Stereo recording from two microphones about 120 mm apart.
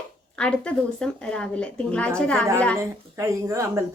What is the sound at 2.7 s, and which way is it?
Speech, 25° right (ahead or behind).